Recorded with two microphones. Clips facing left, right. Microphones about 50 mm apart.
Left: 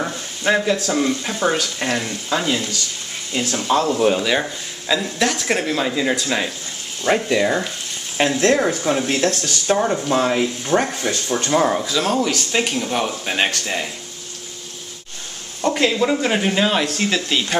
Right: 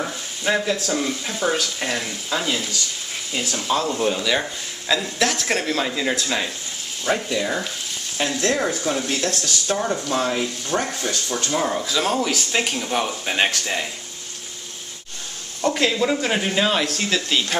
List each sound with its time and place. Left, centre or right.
0.4 s speech: centre
3.8 s speech: left
4.2 s speech: centre
8.3 s speech: left
11.8 s speech: centre
15.6 s speech: centre